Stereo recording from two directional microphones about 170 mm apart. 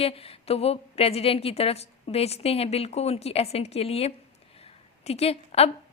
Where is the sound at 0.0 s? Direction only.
35° left (ahead or behind).